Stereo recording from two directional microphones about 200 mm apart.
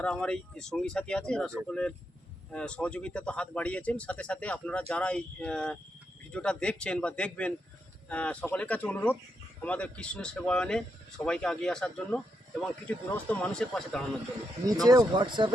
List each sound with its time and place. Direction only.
0.0 s speech: 5° left (ahead or behind)
14.8 s speech: 20° right (ahead or behind)